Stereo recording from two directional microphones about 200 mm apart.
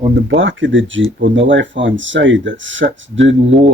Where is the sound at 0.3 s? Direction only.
70° right (ahead or behind).